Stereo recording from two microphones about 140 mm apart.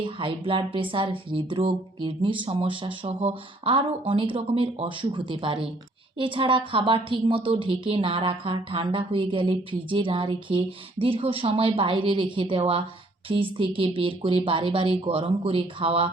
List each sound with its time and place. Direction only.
0.0 s a woman's voice: 40° right (ahead or behind)